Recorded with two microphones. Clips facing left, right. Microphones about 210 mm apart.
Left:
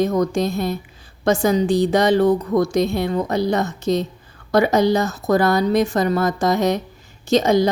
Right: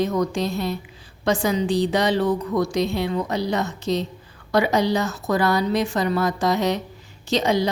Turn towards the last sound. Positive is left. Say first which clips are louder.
# left 5 dB
turn(degrees=45)  # may be behind; listen again after turning